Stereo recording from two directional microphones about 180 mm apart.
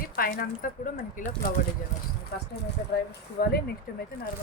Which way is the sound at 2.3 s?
65° left (ahead or behind).